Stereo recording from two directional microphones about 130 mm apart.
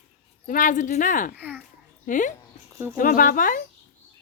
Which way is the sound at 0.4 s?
85° left.